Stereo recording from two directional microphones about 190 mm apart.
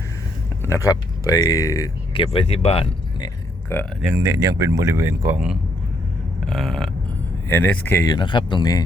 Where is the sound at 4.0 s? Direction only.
15° right (ahead or behind).